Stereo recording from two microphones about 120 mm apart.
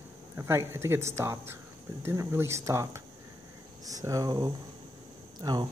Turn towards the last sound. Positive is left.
turn(degrees=-35)  # may be behind; listen again after turning